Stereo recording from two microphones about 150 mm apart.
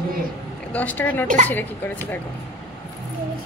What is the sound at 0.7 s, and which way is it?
Speech, 10° left (ahead or behind).